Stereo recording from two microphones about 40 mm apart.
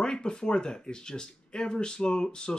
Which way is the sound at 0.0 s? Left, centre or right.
Centre.